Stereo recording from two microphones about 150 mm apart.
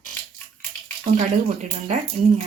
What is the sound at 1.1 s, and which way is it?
Speech, 55° right (ahead or behind).